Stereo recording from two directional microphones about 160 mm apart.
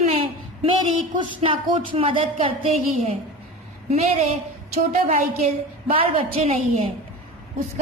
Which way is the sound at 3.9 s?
40° right (ahead or behind).